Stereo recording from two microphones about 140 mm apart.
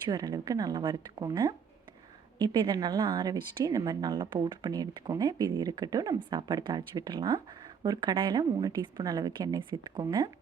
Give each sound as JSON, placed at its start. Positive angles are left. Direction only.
{"t": 0.0, "sound": "speech", "side_deg": -25}